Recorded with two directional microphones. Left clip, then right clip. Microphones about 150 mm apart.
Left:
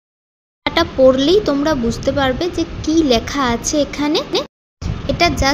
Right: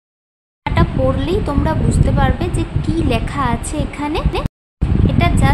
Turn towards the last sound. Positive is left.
turn(degrees=20)  # may be behind; listen again after turning